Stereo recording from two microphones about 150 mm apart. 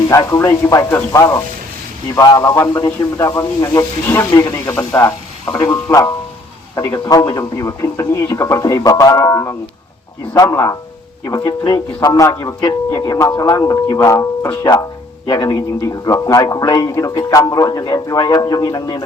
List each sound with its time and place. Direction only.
0.1 s a man's voice: 20° left (ahead or behind)